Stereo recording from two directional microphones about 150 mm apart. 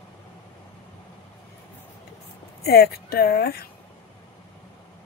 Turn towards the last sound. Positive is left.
turn(degrees=90)